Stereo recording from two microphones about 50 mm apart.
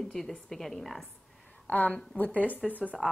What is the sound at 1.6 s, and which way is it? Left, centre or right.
A woman's voice, left.